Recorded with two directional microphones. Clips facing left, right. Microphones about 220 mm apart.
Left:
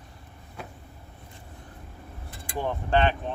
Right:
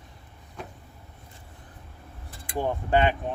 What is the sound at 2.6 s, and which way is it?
Speech, 10° right (ahead or behind).